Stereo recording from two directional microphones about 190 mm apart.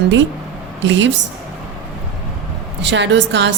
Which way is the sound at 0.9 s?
75° right (ahead or behind).